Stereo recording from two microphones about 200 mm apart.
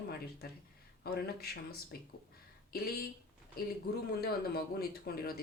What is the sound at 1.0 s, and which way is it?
Speech, 50° left (ahead or behind).